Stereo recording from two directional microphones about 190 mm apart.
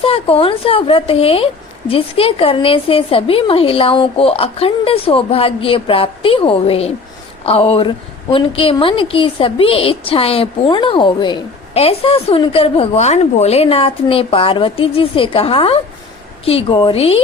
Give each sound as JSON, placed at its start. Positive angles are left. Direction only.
{"t": 0.0, "sound": "a woman's voice", "side_deg": 30}